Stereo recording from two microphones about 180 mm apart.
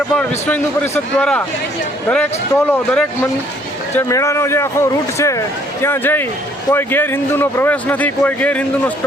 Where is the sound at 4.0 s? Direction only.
15° left (ahead or behind).